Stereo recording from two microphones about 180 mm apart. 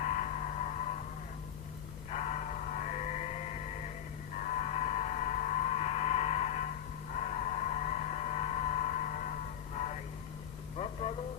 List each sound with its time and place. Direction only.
0.0 s music: 45° left (ahead or behind)
2.0 s music: 40° left (ahead or behind)
10.8 s vehicle: 35° left (ahead or behind)